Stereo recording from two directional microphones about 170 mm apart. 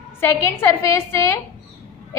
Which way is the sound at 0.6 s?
15° left (ahead or behind).